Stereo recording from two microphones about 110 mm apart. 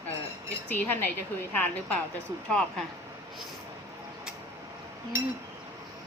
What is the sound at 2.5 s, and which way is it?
Speech, centre (ahead or behind).